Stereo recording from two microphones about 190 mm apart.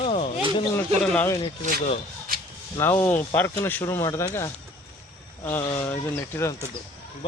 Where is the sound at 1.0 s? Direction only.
5° left (ahead or behind).